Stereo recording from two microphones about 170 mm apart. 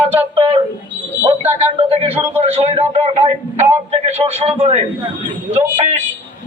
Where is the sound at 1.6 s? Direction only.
35° right (ahead or behind).